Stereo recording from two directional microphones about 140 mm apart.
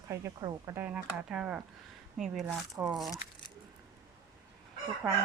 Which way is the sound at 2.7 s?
25° right (ahead or behind).